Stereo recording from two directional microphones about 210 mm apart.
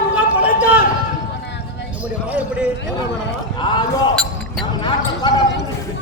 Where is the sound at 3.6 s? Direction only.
20° left (ahead or behind).